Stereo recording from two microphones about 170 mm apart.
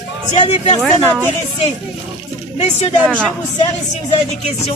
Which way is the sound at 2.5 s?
40° left (ahead or behind).